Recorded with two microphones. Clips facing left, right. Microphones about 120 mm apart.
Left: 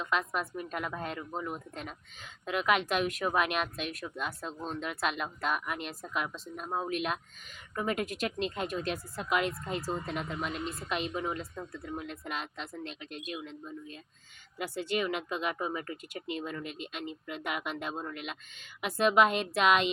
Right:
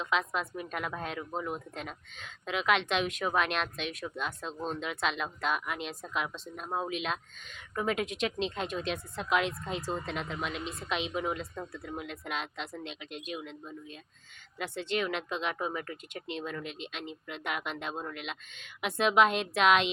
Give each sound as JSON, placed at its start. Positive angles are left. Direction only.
{"t": 0.0, "sound": "a woman's voice", "side_deg": 5}